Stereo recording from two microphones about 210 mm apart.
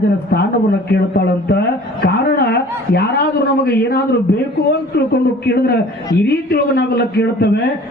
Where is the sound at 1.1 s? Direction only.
50° left (ahead or behind).